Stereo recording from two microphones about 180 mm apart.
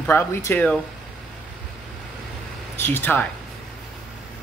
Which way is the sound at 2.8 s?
10° left (ahead or behind).